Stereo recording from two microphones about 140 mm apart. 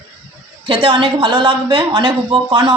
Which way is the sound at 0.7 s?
40° right (ahead or behind).